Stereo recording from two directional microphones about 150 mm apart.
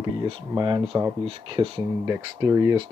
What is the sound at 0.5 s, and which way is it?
Speech, 30° right (ahead or behind).